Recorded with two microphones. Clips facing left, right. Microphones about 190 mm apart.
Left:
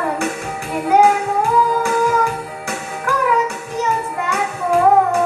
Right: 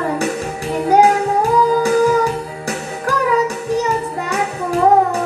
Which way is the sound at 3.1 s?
35° right (ahead or behind).